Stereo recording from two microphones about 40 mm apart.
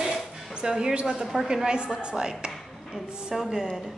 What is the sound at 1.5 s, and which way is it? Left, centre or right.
A woman's voice, centre.